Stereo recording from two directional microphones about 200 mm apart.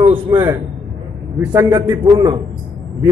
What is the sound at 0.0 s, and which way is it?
A man's voice, 25° right (ahead or behind).